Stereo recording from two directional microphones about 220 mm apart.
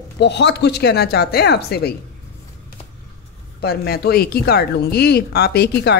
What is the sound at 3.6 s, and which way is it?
Speech, 45° left (ahead or behind).